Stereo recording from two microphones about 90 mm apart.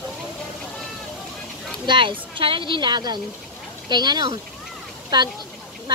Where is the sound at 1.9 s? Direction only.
65° right (ahead or behind).